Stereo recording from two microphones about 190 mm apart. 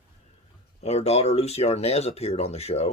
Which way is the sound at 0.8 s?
35° left (ahead or behind).